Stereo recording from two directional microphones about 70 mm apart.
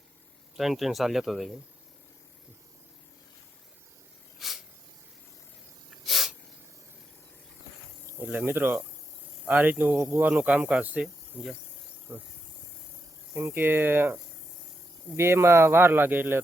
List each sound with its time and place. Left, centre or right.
0.5 s speech: centre
4.4 s snake: centre
6.1 s snake: centre
8.2 s speech: right
10.0 s speech: right
10.2 s speech: right
12.1 s speech: right
13.3 s speech: right